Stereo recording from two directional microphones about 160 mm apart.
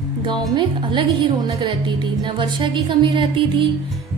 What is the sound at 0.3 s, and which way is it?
A woman's voice, 30° right (ahead or behind).